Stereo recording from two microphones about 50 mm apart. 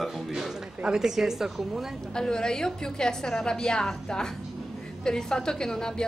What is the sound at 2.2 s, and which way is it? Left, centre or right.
A woman's voice, centre.